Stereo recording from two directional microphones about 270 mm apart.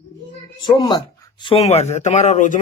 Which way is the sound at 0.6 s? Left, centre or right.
Centre.